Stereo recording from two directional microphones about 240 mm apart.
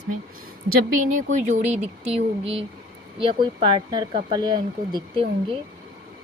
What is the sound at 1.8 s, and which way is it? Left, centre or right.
Speech, right.